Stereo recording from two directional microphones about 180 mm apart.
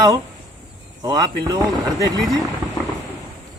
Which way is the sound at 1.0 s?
20° right (ahead or behind).